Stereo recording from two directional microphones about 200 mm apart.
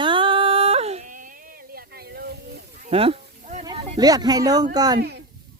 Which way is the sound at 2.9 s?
30° right (ahead or behind).